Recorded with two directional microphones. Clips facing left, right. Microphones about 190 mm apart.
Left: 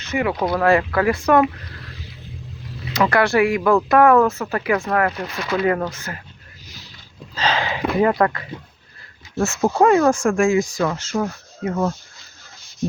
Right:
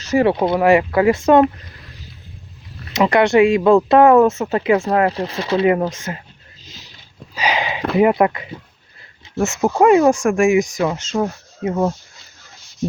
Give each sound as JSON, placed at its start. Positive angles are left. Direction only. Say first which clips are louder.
{"t": 0.1, "sound": "speech", "louder": "right 5 dB", "side_deg": -30}
{"t": 2.9, "sound": "speech", "louder": "right 4 dB", "side_deg": -20}
{"t": 6.7, "sound": "vehicle", "louder": "right 1 dB", "side_deg": -20}
{"t": 7.3, "sound": "a sound", "louder": "right 1 dB", "side_deg": -15}
{"t": 7.9, "sound": "speech", "louder": "right 4 dB", "side_deg": -20}